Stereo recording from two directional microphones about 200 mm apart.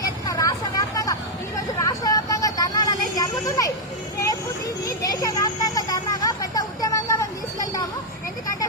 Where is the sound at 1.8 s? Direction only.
15° left (ahead or behind).